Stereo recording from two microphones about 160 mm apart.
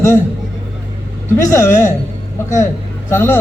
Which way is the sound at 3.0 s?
15° left (ahead or behind).